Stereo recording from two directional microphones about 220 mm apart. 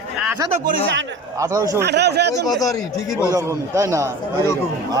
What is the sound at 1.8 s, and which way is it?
Speech, 50° right (ahead or behind).